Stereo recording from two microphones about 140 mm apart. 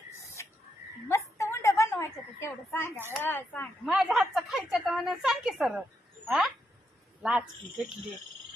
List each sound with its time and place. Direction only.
0.4 s a sound: 20° left (ahead or behind)
3.1 s speech: 15° left (ahead or behind)
3.8 s a woman's voice: 5° right (ahead or behind)
7.2 s a woman's voice: 5° right (ahead or behind)